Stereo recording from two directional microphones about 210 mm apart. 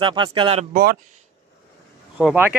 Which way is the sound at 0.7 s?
45° right (ahead or behind).